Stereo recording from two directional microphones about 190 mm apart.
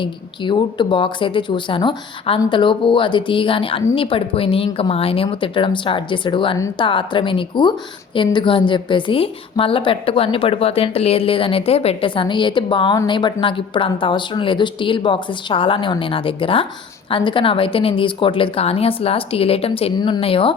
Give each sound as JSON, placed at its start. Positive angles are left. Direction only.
{"t": 0.0, "sound": "a woman's voice", "side_deg": 25}